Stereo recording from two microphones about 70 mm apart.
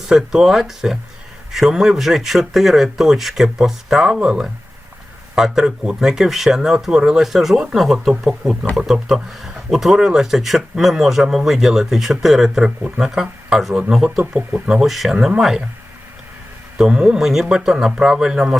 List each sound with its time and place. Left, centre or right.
0.1 s speech: centre
16.7 s speech: centre